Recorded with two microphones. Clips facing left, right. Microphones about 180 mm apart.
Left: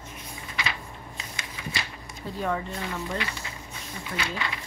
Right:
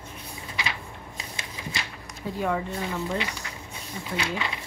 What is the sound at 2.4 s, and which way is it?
Speech, 5° right (ahead or behind).